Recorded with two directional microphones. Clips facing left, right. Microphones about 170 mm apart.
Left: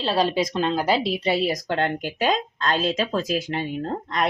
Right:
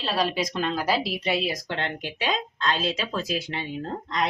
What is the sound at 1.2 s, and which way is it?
A woman's voice, 35° left (ahead or behind).